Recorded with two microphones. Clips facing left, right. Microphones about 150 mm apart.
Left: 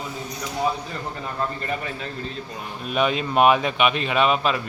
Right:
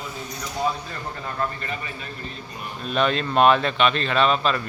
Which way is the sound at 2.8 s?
10° left (ahead or behind).